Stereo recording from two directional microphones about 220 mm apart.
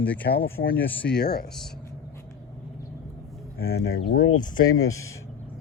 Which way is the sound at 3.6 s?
45° left (ahead or behind).